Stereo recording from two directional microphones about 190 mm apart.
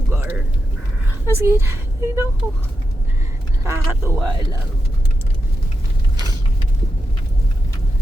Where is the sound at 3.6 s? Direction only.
15° right (ahead or behind).